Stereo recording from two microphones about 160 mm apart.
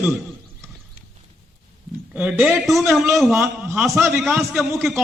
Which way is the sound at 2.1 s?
10° right (ahead or behind).